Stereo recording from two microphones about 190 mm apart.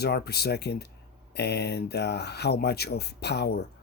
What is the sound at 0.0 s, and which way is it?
Speech, 55° left (ahead or behind).